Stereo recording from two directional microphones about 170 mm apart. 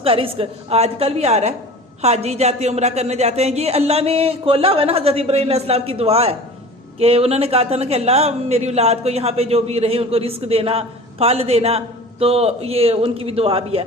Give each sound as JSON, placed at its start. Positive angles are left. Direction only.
{"t": 0.0, "sound": "speech", "side_deg": -35}